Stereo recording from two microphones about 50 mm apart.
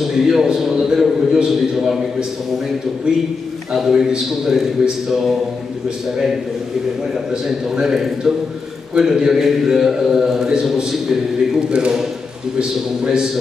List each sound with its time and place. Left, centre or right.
0.1 s a man's voice: centre
3.7 s a man's voice: centre
7.4 s a man's voice: centre